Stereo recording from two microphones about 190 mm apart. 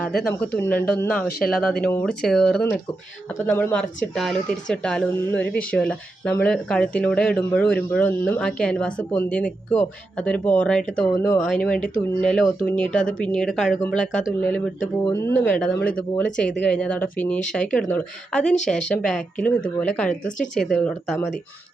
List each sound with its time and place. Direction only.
0.5 s speech: 10° left (ahead or behind)
15.0 s speech: 20° left (ahead or behind)
15.3 s speech: 5° left (ahead or behind)